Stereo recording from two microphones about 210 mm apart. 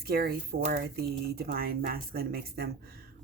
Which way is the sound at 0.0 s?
50° right (ahead or behind).